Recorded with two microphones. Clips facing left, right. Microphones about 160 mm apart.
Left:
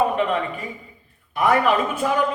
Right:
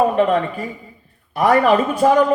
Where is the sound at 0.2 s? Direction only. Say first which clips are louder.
Right 6 dB; 40° right (ahead or behind).